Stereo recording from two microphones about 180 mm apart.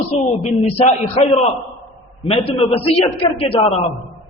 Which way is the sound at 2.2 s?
30° left (ahead or behind).